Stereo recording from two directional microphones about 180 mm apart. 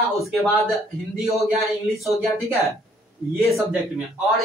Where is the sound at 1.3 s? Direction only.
Centre (ahead or behind).